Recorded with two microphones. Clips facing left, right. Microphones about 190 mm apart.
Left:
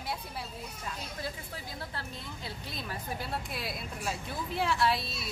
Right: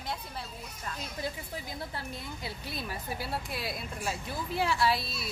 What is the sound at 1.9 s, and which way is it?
Speech, 10° right (ahead or behind).